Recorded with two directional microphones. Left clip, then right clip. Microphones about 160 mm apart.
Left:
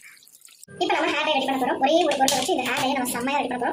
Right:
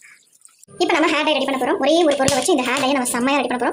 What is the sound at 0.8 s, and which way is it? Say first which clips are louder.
A woman's voice: right 5 dB; 50° right (ahead or behind).